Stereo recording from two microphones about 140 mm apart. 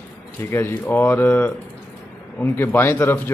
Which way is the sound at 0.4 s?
15° left (ahead or behind).